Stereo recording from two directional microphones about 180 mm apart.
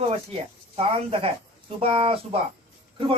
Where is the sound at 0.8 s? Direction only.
35° right (ahead or behind).